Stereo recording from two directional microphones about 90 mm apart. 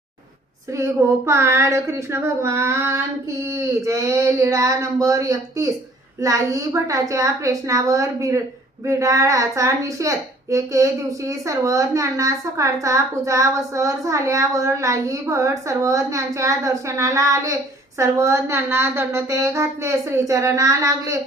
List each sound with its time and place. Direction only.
0.8 s a woman's voice: 30° right (ahead or behind)